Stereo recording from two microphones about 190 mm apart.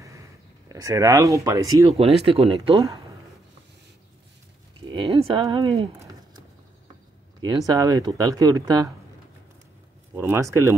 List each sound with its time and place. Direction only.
0.7 s speech: 15° right (ahead or behind)
2.0 s speech: 30° right (ahead or behind)
4.8 s speech: 25° right (ahead or behind)
7.6 s speech: 20° right (ahead or behind)
10.1 s speech: 10° right (ahead or behind)